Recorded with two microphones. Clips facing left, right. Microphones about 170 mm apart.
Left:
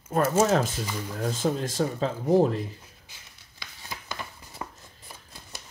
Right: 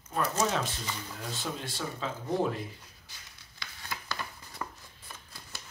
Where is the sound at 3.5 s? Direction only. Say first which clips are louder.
Even; 20° left (ahead or behind).